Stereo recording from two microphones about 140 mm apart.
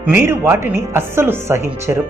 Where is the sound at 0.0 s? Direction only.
15° right (ahead or behind).